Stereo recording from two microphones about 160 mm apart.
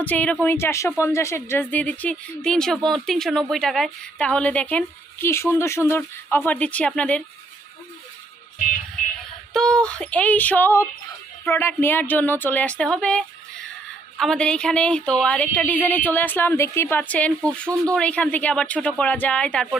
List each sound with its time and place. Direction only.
0.0 s speech: 10° left (ahead or behind)
9.5 s speech: 5° left (ahead or behind)